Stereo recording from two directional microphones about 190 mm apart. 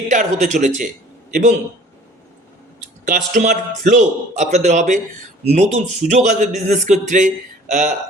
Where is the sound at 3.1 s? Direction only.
40° right (ahead or behind).